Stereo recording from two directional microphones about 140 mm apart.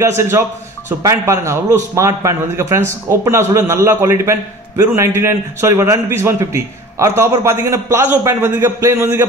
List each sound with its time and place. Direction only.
0.0 s a man's voice: 20° right (ahead or behind)